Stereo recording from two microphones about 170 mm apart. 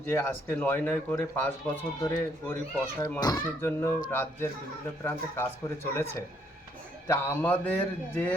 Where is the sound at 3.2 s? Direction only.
25° left (ahead or behind).